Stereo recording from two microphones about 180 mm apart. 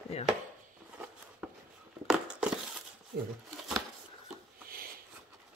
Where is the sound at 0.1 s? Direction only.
35° left (ahead or behind).